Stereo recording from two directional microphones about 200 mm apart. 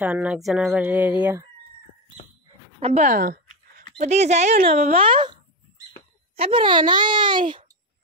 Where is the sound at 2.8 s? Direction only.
35° right (ahead or behind).